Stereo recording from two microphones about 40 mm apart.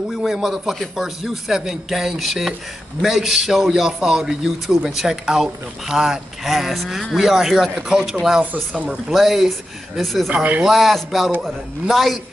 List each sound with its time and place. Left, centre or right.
0.3 s a man's voice: centre
6.5 s a man's voice: centre
10.3 s speech: right
10.7 s a man's voice: centre